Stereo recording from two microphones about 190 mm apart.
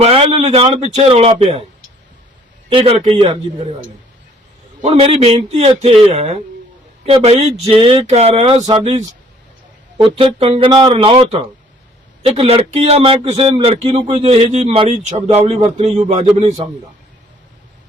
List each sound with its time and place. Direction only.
0.0 s a man's voice: 30° right (ahead or behind)
2.6 s speech: 30° right (ahead or behind)
4.8 s a man's voice: 30° right (ahead or behind)